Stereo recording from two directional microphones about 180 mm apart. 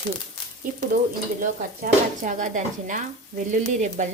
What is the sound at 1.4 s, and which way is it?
A woman's voice, 45° right (ahead or behind).